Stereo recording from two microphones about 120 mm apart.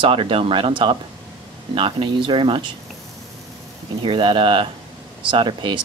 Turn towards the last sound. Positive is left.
turn(degrees=-45)  # may be behind; listen again after turning